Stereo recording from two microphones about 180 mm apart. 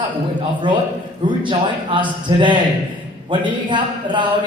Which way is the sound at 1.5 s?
25° right (ahead or behind).